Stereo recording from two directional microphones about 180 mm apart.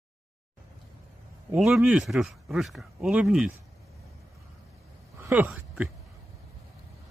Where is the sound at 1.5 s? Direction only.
5° right (ahead or behind).